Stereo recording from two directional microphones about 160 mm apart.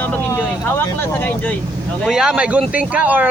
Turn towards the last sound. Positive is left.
turn(degrees=-10)  # may be behind; listen again after turning